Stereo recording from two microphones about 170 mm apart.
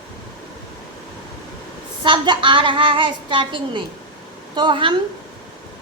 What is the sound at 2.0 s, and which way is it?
A woman's voice, 30° right (ahead or behind).